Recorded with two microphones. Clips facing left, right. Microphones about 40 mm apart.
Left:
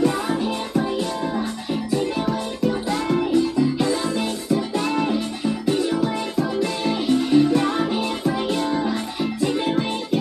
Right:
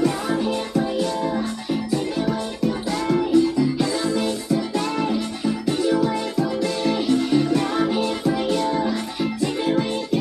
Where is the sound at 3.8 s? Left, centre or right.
Left.